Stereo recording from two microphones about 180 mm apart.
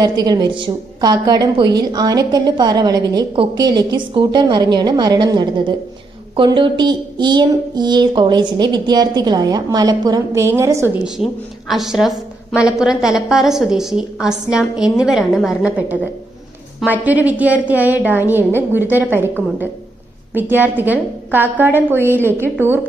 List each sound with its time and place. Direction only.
0.0 s a woman's voice: 20° right (ahead or behind)
11.1 s a woman's voice: centre (ahead or behind)